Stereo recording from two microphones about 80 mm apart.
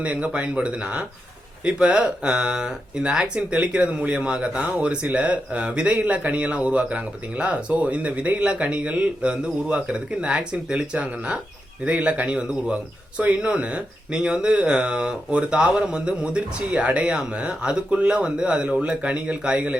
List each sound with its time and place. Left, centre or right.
0.0 s speech: centre